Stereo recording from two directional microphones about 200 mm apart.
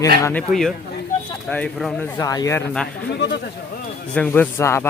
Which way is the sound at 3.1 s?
55° left (ahead or behind).